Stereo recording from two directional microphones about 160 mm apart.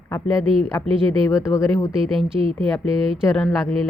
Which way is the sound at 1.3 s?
20° left (ahead or behind).